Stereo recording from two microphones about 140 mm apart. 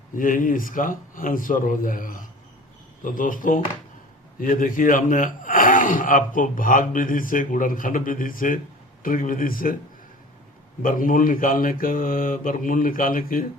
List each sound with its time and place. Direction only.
0.2 s speech: 70° left (ahead or behind)
9.0 s mantra: 80° left
10.8 s mantra: 80° left